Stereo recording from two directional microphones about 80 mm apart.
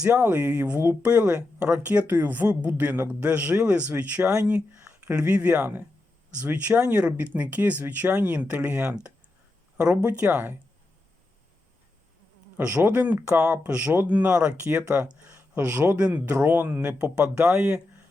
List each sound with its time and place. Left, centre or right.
0.2 s speech: centre
12.7 s speech: right
17.5 s speech: right